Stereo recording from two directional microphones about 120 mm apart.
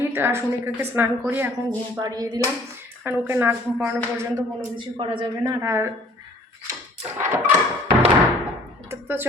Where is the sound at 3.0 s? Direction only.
20° right (ahead or behind).